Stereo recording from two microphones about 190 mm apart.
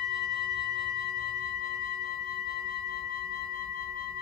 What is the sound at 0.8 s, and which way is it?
Music, 70° right (ahead or behind).